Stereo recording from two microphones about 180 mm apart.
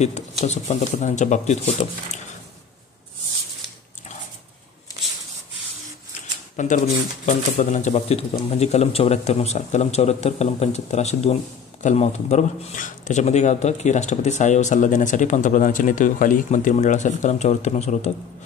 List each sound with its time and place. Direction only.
0.0 s a man's voice: 40° left (ahead or behind)
6.5 s a man's voice: 45° left (ahead or behind)